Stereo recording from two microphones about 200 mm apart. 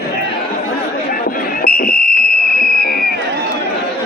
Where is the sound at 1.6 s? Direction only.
45° left (ahead or behind).